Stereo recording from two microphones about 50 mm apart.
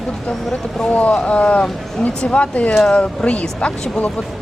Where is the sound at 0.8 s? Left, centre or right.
Left.